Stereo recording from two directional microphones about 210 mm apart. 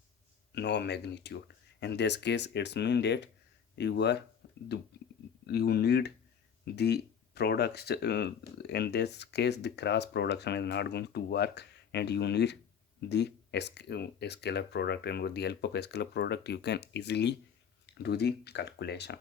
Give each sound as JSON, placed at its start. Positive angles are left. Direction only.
{"t": 0.5, "sound": "speech", "side_deg": 55}
{"t": 4.4, "sound": "a sound", "side_deg": 55}
{"t": 5.5, "sound": "speech", "side_deg": 50}